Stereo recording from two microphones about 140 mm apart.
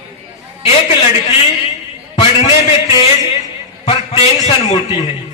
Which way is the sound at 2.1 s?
40° left (ahead or behind).